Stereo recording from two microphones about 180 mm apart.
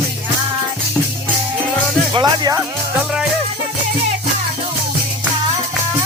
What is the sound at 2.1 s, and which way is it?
Speech, 25° right (ahead or behind).